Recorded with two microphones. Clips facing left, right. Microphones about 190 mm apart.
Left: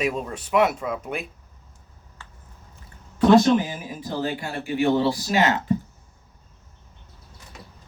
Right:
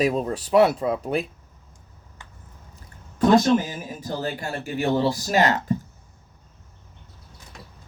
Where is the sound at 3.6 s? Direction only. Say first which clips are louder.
Left 2 dB; 40° right (ahead or behind).